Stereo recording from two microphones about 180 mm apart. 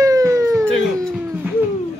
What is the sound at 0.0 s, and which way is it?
Siren, 20° right (ahead or behind).